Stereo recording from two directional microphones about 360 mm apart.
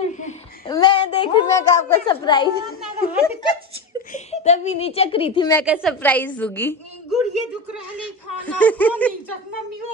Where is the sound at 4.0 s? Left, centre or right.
Centre.